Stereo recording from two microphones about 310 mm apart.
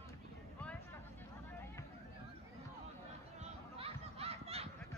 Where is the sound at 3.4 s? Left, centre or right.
Centre.